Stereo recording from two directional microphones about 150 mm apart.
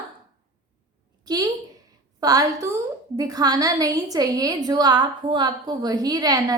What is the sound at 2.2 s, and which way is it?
A woman's voice, 25° right (ahead or behind).